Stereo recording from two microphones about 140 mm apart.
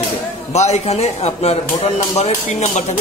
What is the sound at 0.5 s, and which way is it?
A man's voice, 50° left (ahead or behind).